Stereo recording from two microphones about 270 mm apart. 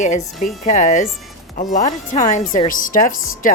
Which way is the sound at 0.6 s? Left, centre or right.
Left.